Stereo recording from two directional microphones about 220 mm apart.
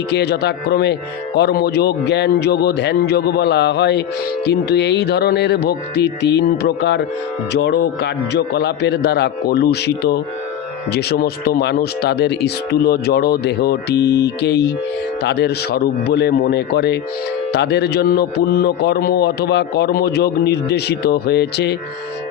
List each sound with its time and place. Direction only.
0.1 s a man's voice: 50° left (ahead or behind)